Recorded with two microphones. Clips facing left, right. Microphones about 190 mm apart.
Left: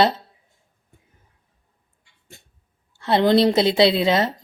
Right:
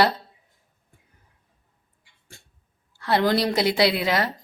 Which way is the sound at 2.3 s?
20° left (ahead or behind).